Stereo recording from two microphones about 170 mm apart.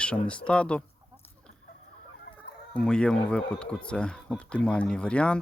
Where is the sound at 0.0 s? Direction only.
5° left (ahead or behind).